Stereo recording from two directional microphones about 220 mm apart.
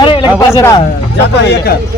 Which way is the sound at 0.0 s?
20° left (ahead or behind).